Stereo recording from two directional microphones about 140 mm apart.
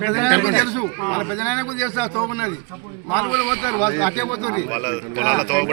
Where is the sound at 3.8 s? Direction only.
15° left (ahead or behind).